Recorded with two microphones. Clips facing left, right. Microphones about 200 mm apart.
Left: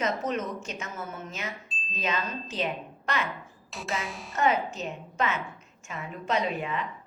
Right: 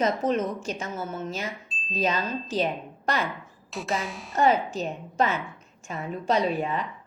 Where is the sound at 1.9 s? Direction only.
35° right (ahead or behind).